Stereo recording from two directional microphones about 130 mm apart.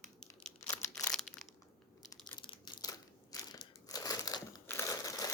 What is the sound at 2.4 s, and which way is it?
Crushing, 35° left (ahead or behind).